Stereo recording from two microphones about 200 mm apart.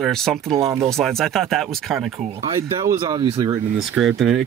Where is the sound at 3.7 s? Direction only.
Centre (ahead or behind).